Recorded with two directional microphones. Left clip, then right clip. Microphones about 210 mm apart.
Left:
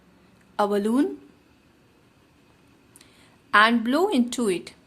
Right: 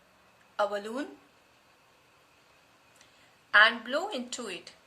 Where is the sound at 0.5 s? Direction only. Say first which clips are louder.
Left 8 dB; 40° left (ahead or behind).